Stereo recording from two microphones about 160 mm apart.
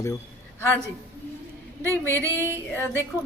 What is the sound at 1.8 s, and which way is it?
Speech, 15° left (ahead or behind).